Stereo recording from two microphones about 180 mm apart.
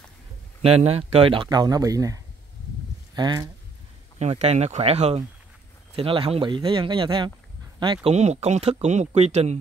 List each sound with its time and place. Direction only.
0.6 s speech: 35° right (ahead or behind)
4.2 s speech: 35° right (ahead or behind)
8.1 s speech: 35° right (ahead or behind)